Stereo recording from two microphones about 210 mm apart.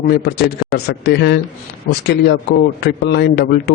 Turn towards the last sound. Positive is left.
turn(degrees=50)  # may be behind; listen again after turning